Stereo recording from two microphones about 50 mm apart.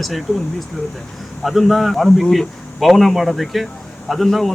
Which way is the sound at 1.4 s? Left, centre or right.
Centre.